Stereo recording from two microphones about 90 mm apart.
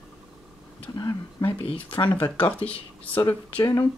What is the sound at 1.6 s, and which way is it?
Speech, 75° left (ahead or behind).